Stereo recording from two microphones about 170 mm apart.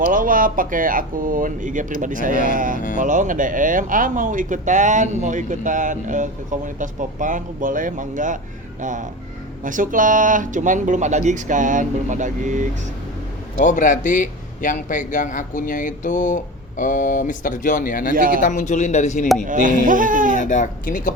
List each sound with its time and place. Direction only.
0.1 s speech: 50° right (ahead or behind)
13.6 s a man's voice: 45° left (ahead or behind)
18.1 s speech: 55° right (ahead or behind)
18.3 s a man's voice: 45° left (ahead or behind)
19.5 s speech: 50° right (ahead or behind)
20.3 s a man's voice: 45° left (ahead or behind)